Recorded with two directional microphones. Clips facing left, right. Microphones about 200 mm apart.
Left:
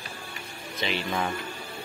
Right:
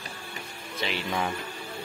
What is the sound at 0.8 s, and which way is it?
Speech, 5° right (ahead or behind).